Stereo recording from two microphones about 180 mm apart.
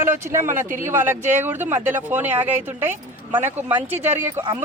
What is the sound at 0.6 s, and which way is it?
Speech, 45° right (ahead or behind).